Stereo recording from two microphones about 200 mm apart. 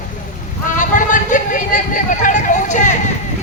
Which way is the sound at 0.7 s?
40° left (ahead or behind).